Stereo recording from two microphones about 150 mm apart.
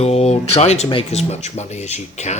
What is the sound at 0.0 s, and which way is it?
Speech, 45° left (ahead or behind).